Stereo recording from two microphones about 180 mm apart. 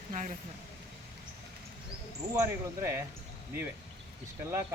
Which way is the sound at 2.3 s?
15° right (ahead or behind).